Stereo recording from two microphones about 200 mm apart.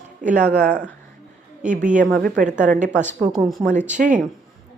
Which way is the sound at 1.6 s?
40° right (ahead or behind).